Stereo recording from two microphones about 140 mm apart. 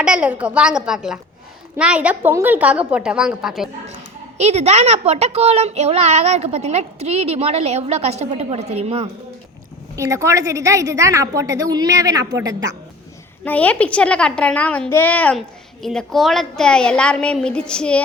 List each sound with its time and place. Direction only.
0.0 s a woman's voice: 10° right (ahead or behind)
4.4 s a child's voice: 55° right (ahead or behind)
9.9 s a woman's voice: 20° right (ahead or behind)
13.4 s a child's voice: 10° left (ahead or behind)